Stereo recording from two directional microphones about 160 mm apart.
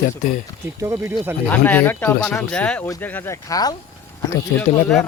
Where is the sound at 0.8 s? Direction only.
20° right (ahead or behind).